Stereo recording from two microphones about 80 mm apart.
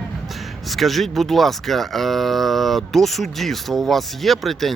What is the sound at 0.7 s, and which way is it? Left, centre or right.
Speech, centre.